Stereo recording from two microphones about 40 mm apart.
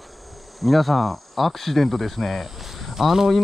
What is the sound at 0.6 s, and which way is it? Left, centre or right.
Speech, centre.